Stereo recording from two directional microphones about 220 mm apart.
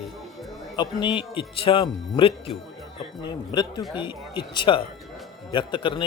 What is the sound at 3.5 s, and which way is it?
Speech, 20° left (ahead or behind).